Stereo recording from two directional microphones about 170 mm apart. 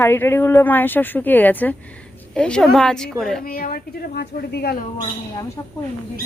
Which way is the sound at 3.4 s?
55° left (ahead or behind).